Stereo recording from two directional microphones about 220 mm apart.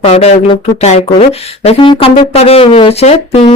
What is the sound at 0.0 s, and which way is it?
Speech, 25° left (ahead or behind).